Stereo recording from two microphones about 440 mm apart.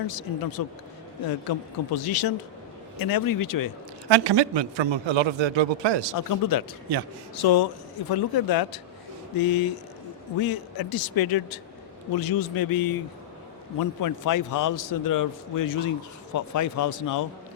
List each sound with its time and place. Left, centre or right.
0.1 s a man's voice: left
4.1 s a man's voice: right
6.1 s a man's voice: left